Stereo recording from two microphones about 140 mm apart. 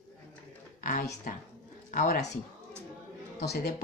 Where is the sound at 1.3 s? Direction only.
90° left.